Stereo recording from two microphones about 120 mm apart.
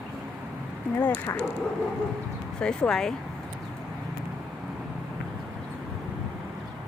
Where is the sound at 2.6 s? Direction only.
5° left (ahead or behind).